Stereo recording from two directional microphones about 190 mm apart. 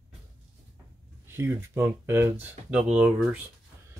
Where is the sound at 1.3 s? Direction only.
15° right (ahead or behind).